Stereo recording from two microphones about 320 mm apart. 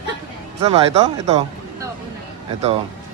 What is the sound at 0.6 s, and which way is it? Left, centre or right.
Speech, centre.